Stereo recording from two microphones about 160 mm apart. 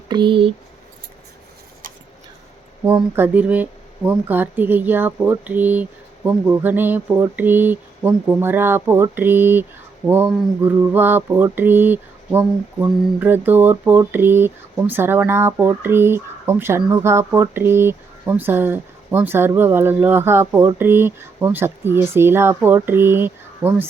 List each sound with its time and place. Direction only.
0.1 s speech: 30° right (ahead or behind)
2.8 s mantra: 10° right (ahead or behind)